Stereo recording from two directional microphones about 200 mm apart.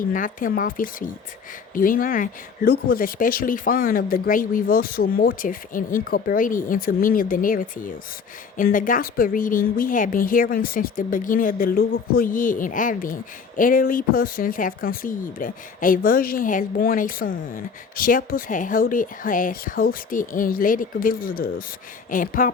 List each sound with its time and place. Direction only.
0.1 s speech: 40° left (ahead or behind)